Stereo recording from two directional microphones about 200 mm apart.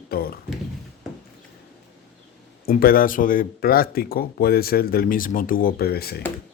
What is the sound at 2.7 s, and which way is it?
Speech, 45° left (ahead or behind).